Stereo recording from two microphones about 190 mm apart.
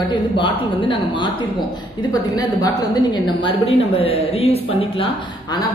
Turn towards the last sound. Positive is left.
turn(degrees=30)  # may be behind; listen again after turning